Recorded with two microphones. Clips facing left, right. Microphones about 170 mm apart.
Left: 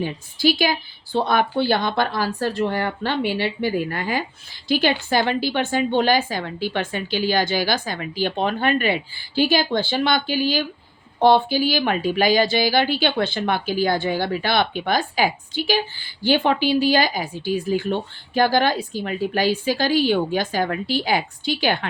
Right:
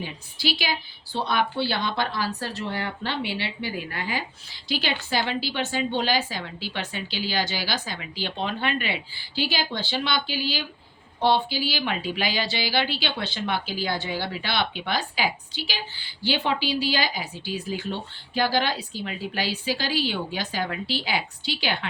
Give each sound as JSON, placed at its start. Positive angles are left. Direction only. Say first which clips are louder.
{"t": 0.0, "sound": "speech", "louder": "left 9 dB", "side_deg": 45}